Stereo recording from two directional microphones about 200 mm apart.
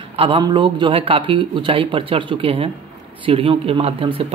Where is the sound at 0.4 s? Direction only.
25° right (ahead or behind).